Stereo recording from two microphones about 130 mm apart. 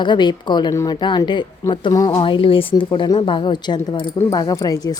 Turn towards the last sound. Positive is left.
turn(degrees=30)  # may be behind; listen again after turning